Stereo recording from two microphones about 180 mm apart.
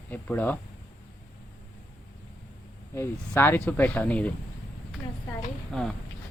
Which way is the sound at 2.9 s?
10° left (ahead or behind).